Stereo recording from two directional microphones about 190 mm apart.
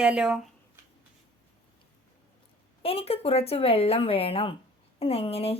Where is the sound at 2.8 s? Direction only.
30° left (ahead or behind).